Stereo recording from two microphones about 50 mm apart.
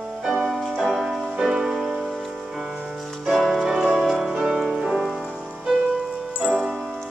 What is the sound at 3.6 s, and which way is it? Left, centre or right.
Music, centre.